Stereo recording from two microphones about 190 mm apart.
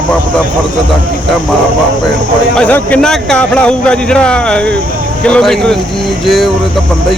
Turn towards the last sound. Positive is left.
turn(degrees=0)  # may be behind; listen again after turning